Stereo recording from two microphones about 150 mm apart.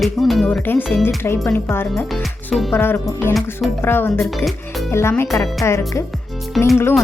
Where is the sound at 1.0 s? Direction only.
15° left (ahead or behind).